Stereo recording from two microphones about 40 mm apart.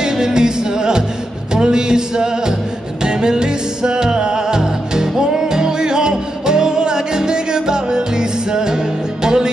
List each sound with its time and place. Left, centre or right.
0.0 s music: centre